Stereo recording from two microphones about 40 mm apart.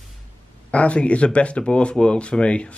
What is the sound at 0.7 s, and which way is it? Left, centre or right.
Speech, left.